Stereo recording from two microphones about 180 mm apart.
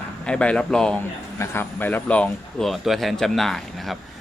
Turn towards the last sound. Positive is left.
turn(degrees=0)  # may be behind; listen again after turning